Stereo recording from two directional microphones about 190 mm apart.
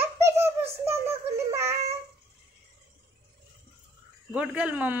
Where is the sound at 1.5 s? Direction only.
15° right (ahead or behind).